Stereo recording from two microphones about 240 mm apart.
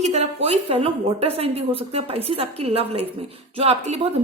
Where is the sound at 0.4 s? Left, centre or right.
Right.